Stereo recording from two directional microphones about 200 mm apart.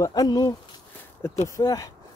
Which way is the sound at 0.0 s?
20° left (ahead or behind).